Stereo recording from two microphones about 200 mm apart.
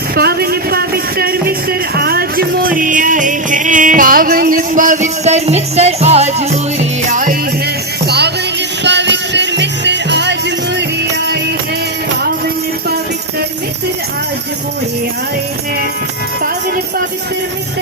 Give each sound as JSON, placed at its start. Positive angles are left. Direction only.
{"t": 0.2, "sound": "a sound", "side_deg": -50}
{"t": 2.0, "sound": "music", "side_deg": -50}
{"t": 8.0, "sound": "music", "side_deg": -55}